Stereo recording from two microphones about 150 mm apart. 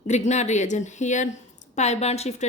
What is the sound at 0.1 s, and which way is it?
Speech, 50° left (ahead or behind).